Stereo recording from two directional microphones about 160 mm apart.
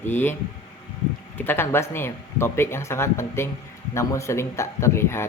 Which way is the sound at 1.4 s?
15° left (ahead or behind).